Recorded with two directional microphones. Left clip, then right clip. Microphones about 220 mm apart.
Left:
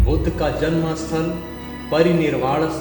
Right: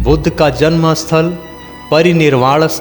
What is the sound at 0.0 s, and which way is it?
A man's voice, 50° right (ahead or behind).